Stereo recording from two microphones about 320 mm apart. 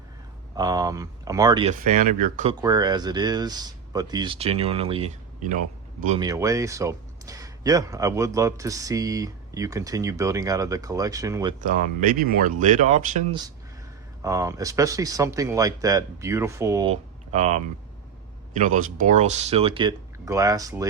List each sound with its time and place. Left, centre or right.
0.5 s speech: centre
11.6 s speech: right